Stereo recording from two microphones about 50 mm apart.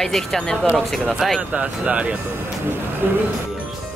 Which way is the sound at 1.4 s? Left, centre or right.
Right.